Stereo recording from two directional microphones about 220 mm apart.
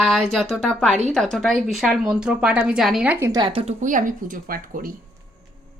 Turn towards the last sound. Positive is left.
turn(degrees=-40)  # may be behind; listen again after turning